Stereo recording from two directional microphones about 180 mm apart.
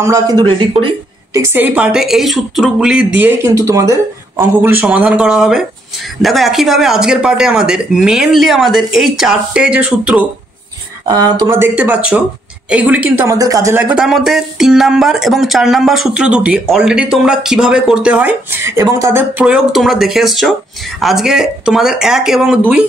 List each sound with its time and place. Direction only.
0.0 s speech: 20° right (ahead or behind)
1.3 s speech: 10° right (ahead or behind)
11.1 s speech: 20° right (ahead or behind)
13.8 s speech: 5° right (ahead or behind)
19.4 s speech: centre (ahead or behind)